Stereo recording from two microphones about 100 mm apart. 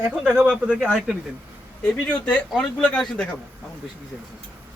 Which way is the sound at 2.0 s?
10° left (ahead or behind).